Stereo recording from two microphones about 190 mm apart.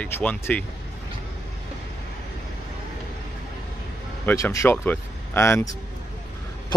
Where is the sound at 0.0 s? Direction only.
5° left (ahead or behind).